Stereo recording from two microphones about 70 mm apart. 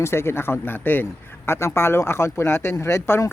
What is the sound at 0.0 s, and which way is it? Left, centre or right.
Speech, left.